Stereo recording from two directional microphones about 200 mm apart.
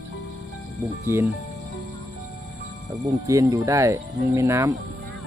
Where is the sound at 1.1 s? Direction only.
15° right (ahead or behind).